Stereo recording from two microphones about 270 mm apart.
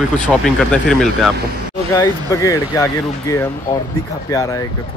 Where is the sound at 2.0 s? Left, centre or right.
Centre.